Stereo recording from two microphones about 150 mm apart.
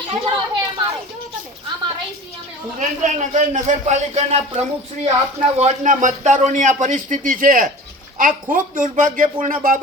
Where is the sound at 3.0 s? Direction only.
55° right (ahead or behind).